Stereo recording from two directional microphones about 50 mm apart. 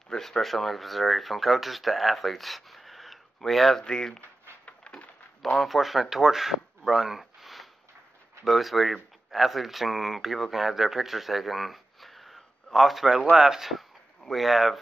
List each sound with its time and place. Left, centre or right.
0.1 s speech: centre
3.8 s speech: centre
4.6 s a sound: left
5.4 s speech: centre